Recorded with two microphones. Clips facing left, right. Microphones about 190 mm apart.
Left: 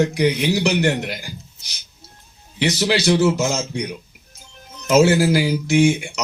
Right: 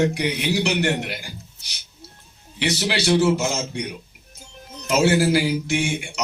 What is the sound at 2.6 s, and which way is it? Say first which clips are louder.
Speech: left 4 dB; 45° left (ahead or behind).